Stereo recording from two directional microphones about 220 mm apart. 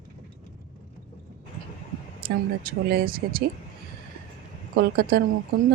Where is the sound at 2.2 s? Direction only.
45° right (ahead or behind).